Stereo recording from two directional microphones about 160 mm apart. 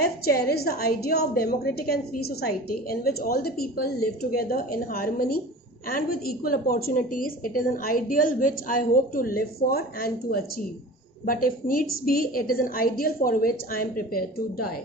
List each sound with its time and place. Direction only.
0.0 s a woman's voice: 75° left (ahead or behind)